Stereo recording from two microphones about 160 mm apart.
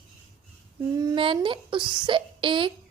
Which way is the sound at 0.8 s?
20° right (ahead or behind).